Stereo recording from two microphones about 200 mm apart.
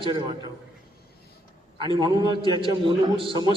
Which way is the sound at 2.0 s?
25° right (ahead or behind).